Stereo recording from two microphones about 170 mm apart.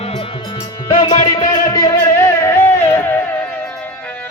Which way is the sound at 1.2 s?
20° left (ahead or behind).